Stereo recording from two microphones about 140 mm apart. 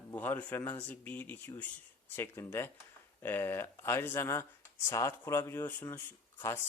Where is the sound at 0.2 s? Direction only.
15° left (ahead or behind).